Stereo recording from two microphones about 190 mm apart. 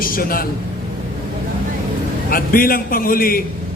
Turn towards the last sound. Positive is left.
turn(degrees=50)  # may be behind; listen again after turning